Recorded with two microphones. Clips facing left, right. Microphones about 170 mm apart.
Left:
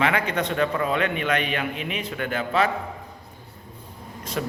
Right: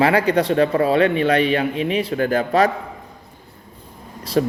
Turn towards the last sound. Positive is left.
turn(degrees=-35)  # may be behind; listen again after turning